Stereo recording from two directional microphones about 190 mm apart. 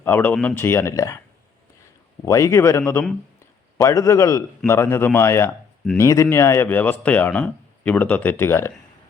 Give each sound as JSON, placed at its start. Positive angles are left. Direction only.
{"t": 0.0, "sound": "speech", "side_deg": 10}
{"t": 2.2, "sound": "speech", "side_deg": 15}